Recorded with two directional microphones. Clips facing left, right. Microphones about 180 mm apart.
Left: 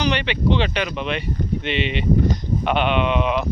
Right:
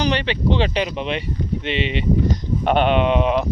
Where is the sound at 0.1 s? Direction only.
35° right (ahead or behind).